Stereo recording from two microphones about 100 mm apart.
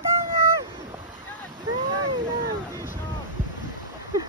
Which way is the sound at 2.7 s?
25° right (ahead or behind).